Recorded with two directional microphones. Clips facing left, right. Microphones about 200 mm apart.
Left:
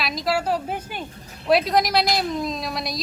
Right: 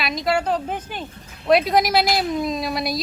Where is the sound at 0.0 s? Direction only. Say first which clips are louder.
Right 2 dB; centre (ahead or behind).